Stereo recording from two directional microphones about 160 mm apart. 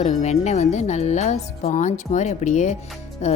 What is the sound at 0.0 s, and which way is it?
Speech, 45° left (ahead or behind).